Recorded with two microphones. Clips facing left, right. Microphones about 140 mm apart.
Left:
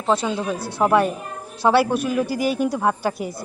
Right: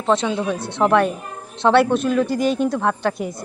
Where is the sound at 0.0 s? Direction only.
5° left (ahead or behind).